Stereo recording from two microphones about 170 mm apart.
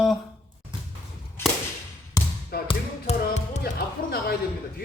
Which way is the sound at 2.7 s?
40° left (ahead or behind).